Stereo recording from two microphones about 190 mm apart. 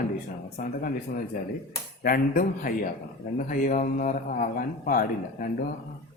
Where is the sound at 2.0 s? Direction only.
50° left (ahead or behind).